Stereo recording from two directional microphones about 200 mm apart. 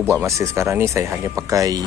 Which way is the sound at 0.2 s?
15° right (ahead or behind).